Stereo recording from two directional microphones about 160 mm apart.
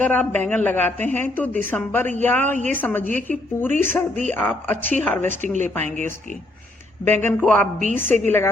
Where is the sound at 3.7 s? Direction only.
50° right (ahead or behind).